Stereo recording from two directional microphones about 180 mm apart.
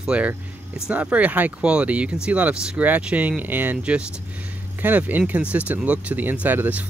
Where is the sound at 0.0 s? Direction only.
5° right (ahead or behind).